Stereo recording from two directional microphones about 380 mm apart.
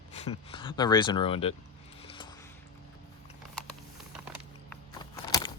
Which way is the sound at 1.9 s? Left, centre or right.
Centre.